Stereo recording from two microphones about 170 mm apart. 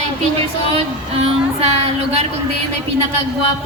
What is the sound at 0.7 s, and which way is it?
Speech, 35° right (ahead or behind).